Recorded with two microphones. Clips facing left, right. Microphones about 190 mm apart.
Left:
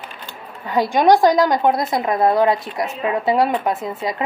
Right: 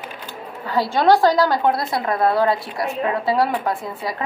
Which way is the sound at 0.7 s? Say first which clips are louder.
Left 2 dB; 15° left (ahead or behind).